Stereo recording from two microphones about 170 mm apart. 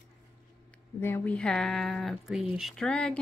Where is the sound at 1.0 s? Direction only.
10° left (ahead or behind).